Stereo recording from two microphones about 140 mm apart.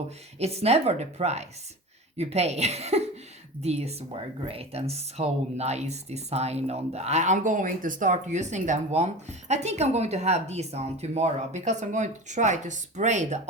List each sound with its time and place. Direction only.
0.3 s speech: 50° right (ahead or behind)